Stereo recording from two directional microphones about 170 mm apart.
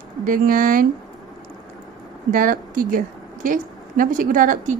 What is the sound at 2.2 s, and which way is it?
A woman's voice, 55° right (ahead or behind).